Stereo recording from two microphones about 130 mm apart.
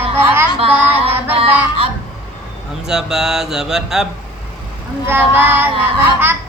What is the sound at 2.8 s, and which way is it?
Speech, 5° right (ahead or behind).